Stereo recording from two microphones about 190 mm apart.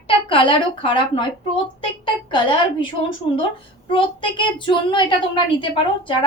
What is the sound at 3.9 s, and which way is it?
A woman's voice, 25° left (ahead or behind).